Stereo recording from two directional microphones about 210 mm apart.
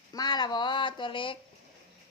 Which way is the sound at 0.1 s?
20° left (ahead or behind).